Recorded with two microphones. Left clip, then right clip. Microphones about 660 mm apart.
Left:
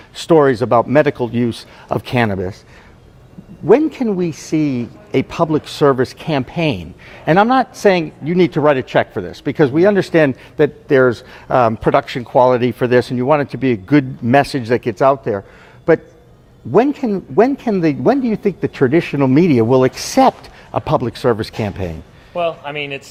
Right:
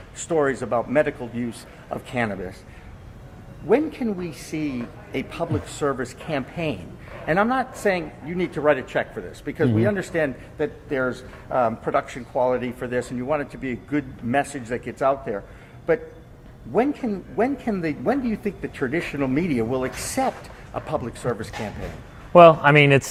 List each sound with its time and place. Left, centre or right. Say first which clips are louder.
0.3 s speech: left 10 dB; left
3.7 s speech: left 9 dB; left
16.7 s speech: left 9 dB; left
22.3 s a man's voice: right 9 dB; right